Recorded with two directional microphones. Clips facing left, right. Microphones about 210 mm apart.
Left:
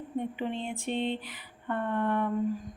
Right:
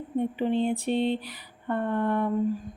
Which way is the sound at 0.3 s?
35° right (ahead or behind).